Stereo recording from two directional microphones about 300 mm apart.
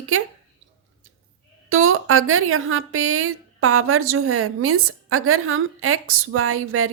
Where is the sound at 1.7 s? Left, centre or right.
Right.